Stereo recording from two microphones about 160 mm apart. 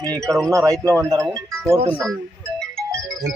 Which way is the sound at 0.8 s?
20° right (ahead or behind).